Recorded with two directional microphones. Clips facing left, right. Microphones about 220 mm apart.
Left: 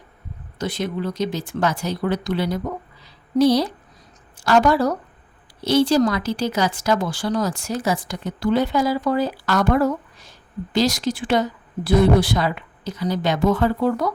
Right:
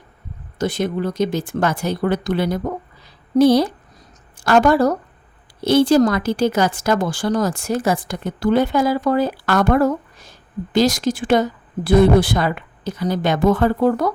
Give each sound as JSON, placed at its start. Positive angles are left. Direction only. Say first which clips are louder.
{"t": 0.6, "sound": "speech", "louder": "right 4 dB", "side_deg": -50}
{"t": 3.0, "sound": "a sound", "louder": "right 3 dB", "side_deg": -50}
{"t": 4.4, "sound": "a woman's voice", "louder": "right 3 dB", "side_deg": -50}